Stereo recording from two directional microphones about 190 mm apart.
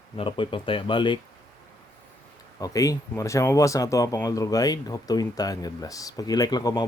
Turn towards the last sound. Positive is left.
turn(degrees=20)  # may be behind; listen again after turning